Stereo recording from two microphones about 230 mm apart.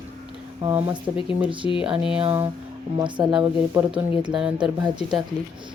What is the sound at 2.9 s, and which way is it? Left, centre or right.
Speech, centre.